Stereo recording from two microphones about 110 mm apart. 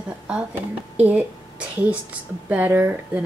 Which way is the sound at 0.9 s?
15° right (ahead or behind).